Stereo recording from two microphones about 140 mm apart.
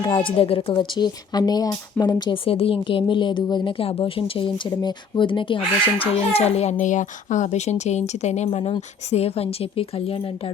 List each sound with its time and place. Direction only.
0.0 s speech: 35° left (ahead or behind)